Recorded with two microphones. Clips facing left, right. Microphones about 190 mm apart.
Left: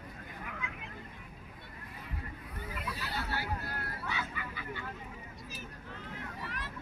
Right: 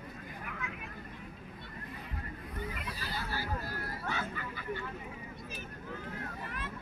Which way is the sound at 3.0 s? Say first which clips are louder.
Left 1 dB; 65° left (ahead or behind).